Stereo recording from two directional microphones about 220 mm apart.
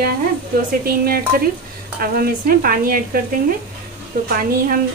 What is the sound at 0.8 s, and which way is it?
A woman's voice, 45° right (ahead or behind).